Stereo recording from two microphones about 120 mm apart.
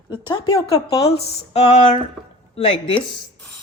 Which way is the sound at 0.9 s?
55° left (ahead or behind).